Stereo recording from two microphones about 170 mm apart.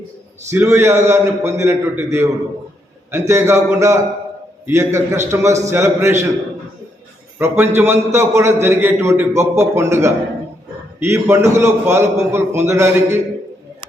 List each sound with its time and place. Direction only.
0.5 s a man's voice: 15° right (ahead or behind)
7.3 s a man's voice: 15° right (ahead or behind)